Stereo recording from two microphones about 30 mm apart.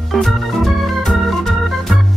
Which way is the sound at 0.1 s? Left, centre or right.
Centre.